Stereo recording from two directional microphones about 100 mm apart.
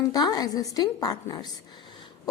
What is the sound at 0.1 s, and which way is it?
A woman's voice, 40° left (ahead or behind).